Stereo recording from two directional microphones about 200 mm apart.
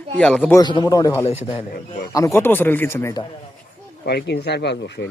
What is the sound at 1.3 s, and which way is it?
Speech, 30° left (ahead or behind).